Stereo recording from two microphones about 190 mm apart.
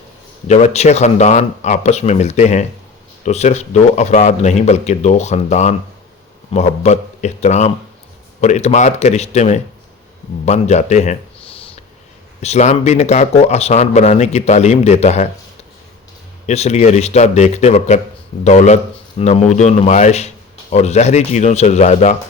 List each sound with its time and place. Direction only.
0.4 s a man's voice: 35° left (ahead or behind)
16.5 s a man's voice: 35° left (ahead or behind)